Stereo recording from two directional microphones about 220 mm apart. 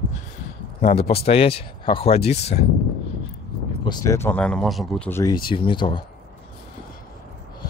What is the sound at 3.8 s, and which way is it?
Speech, 15° left (ahead or behind).